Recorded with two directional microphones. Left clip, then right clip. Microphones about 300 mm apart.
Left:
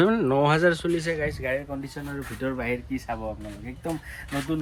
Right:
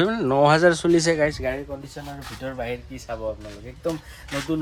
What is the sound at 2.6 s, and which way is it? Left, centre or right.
Speech, centre.